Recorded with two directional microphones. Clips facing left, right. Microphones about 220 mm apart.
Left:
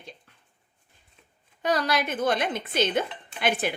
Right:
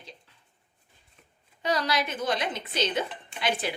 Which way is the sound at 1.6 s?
55° left (ahead or behind).